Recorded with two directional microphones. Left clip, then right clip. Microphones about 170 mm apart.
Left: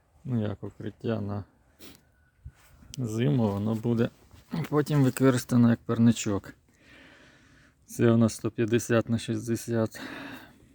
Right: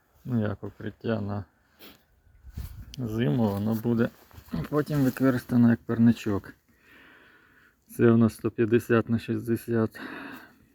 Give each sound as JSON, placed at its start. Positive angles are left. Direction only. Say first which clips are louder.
{"t": 0.3, "sound": "speech", "louder": "right 2 dB", "side_deg": 15}
{"t": 2.6, "sound": "a sound", "louder": "right 10 dB", "side_deg": -40}
{"t": 2.9, "sound": "speech", "louder": "even", "side_deg": 30}